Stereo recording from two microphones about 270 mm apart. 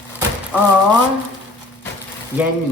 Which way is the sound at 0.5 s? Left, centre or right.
Centre.